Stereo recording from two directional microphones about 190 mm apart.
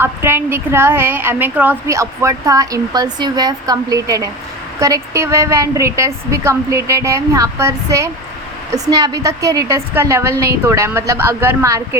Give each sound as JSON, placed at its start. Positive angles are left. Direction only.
{"t": 0.0, "sound": "a woman's voice", "side_deg": -10}